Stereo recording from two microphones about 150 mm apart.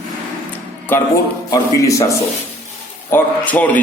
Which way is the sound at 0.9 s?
15° left (ahead or behind).